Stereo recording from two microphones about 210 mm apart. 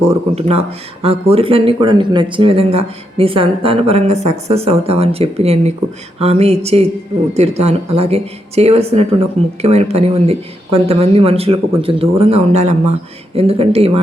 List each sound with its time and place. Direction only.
0.3 s speech: 30° right (ahead or behind)